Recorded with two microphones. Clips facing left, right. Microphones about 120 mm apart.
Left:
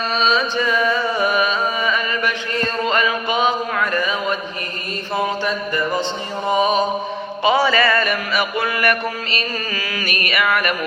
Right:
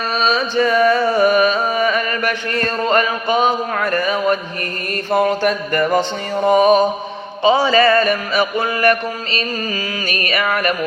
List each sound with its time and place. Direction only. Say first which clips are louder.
0.2 s music: right 3 dB; 40° right (ahead or behind)
7.4 s music: right 3 dB; 25° right (ahead or behind)
8.5 s mantra: right 4 dB; 25° right (ahead or behind)
10.1 s music: even; 35° right (ahead or behind)